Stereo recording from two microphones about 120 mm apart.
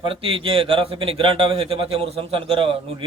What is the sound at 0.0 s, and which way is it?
A man's voice, 50° right (ahead or behind).